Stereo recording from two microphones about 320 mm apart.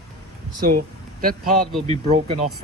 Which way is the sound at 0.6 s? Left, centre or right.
Right.